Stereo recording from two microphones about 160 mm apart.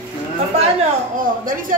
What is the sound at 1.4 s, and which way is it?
Speech, 60° right (ahead or behind).